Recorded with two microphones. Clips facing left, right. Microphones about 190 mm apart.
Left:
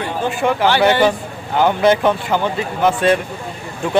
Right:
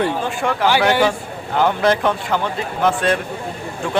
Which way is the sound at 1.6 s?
Centre (ahead or behind).